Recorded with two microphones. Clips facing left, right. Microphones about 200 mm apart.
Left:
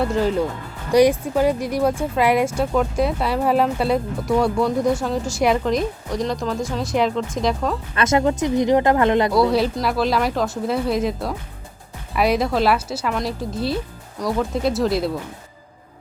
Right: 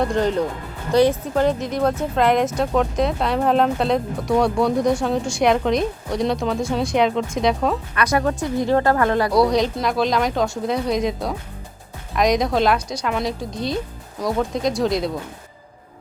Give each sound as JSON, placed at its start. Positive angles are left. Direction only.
{"t": 0.0, "sound": "speech", "side_deg": 5}
{"t": 7.9, "sound": "speech", "side_deg": 25}
{"t": 9.3, "sound": "speech", "side_deg": 5}